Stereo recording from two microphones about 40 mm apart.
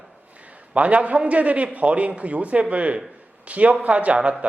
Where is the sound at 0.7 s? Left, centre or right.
Right.